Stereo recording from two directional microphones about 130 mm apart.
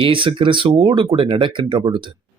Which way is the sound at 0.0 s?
40° right (ahead or behind).